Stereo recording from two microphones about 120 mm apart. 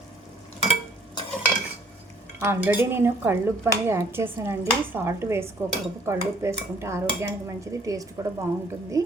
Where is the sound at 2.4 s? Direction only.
20° right (ahead or behind).